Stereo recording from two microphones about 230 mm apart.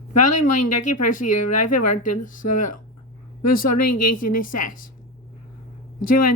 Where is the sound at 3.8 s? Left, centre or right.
Left.